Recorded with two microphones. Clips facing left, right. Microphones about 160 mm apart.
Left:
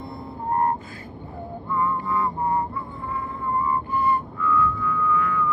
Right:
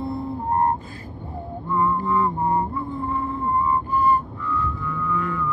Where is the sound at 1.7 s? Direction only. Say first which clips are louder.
Right 3 dB; 30° right (ahead or behind).